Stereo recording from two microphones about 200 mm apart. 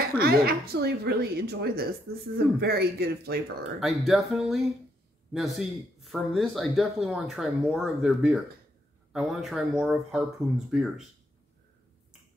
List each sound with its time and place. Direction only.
0.2 s a woman's voice: 50° right (ahead or behind)
3.8 s speech: centre (ahead or behind)